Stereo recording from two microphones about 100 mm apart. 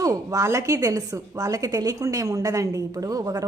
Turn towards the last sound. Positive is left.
turn(degrees=-35)  # may be behind; listen again after turning